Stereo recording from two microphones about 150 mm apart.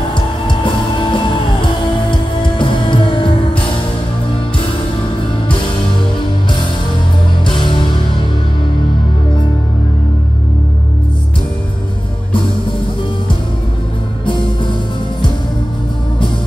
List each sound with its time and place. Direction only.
0.1 s music: 30° left (ahead or behind)
7.4 s music: 35° left (ahead or behind)